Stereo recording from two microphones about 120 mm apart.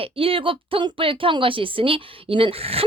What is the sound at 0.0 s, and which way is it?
A woman's voice, 50° right (ahead or behind).